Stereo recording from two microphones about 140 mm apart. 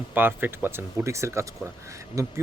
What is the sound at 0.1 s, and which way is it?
Speech, 15° right (ahead or behind).